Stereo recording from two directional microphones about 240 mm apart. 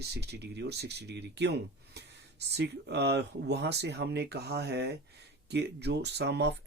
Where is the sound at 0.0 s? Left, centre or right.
Right.